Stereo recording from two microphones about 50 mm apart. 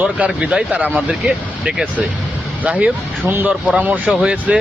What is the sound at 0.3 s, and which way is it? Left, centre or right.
Speech, right.